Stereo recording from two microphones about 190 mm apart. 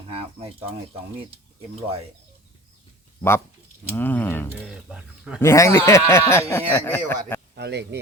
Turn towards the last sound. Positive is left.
turn(degrees=-60)  # may be behind; listen again after turning